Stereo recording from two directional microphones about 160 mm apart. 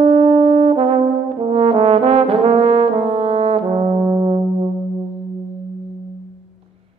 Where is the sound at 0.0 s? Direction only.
35° right (ahead or behind).